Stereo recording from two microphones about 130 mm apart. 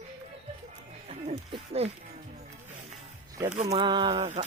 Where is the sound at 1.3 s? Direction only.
50° right (ahead or behind).